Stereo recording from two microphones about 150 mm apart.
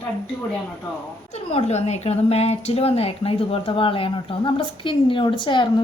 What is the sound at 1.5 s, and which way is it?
Speech, 45° left (ahead or behind).